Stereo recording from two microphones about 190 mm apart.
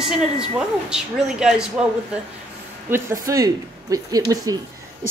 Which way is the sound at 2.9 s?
15° right (ahead or behind).